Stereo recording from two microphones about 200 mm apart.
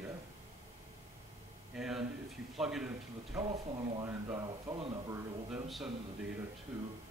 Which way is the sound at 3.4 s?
25° right (ahead or behind).